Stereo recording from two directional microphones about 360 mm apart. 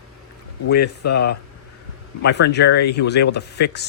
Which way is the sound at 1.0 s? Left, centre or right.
Left.